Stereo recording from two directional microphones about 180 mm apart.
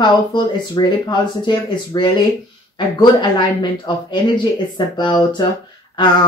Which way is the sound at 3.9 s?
25° left (ahead or behind).